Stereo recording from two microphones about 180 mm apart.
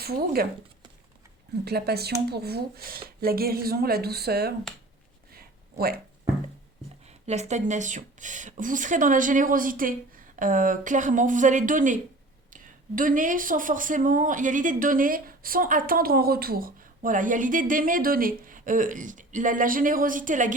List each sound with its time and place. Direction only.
0.0 s speech: 60° right (ahead or behind)
1.6 s speech: 60° right (ahead or behind)
5.3 s a sound: 55° right (ahead or behind)
7.1 s speech: 40° right (ahead or behind)